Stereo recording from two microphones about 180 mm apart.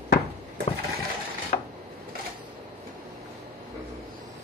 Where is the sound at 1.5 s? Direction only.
50° left (ahead or behind).